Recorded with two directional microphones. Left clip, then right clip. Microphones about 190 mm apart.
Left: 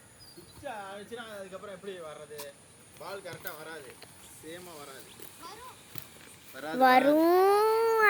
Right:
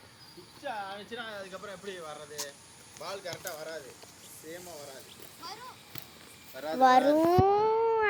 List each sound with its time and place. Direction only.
0.6 s speech: 5° left (ahead or behind)
3.0 s speech: 15° left (ahead or behind)
3.4 s speech: 50° left (ahead or behind)
6.7 s a child's voice: 20° left (ahead or behind)
7.1 s a sound: 15° left (ahead or behind)